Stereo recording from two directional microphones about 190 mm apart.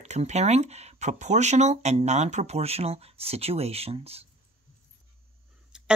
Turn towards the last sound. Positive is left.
turn(degrees=-5)  # may be behind; listen again after turning